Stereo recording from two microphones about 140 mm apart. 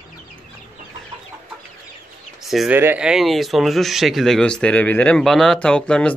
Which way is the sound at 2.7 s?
15° right (ahead or behind).